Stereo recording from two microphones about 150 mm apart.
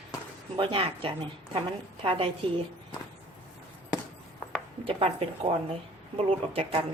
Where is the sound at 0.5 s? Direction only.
35° right (ahead or behind).